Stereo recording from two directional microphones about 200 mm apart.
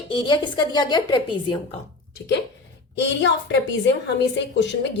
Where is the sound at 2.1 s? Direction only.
60° left (ahead or behind).